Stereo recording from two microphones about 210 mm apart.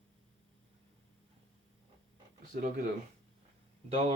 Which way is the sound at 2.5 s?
40° right (ahead or behind).